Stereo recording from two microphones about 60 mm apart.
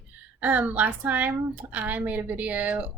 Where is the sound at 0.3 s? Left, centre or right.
Right.